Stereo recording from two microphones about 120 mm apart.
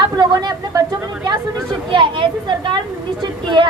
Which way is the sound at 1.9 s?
45° right (ahead or behind).